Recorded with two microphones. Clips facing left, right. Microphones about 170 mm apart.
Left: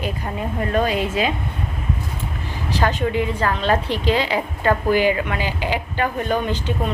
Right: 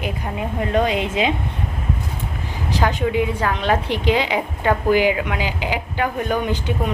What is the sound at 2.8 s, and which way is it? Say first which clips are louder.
A woman's voice: right 1 dB; 10° right (ahead or behind).